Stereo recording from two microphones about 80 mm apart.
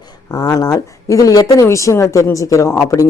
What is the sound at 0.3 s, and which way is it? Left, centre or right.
Speech, left.